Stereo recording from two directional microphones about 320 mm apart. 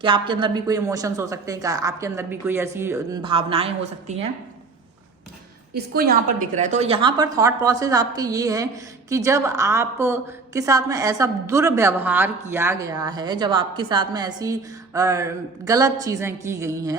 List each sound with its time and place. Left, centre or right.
0.0 s a woman's voice: centre
5.7 s a woman's voice: right; by 16.9 s centre